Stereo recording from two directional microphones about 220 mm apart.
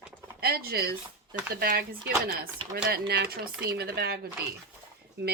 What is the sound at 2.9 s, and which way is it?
Speech, 50° right (ahead or behind).